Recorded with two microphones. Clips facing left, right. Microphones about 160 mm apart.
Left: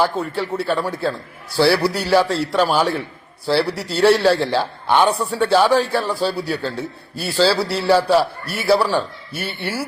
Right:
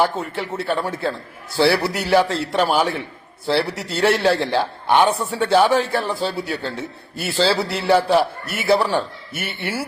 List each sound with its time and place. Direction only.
0.0 s a man's voice: 20° right (ahead or behind)